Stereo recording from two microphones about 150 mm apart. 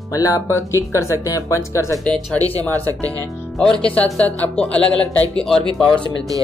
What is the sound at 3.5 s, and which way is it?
Speech, 5° left (ahead or behind).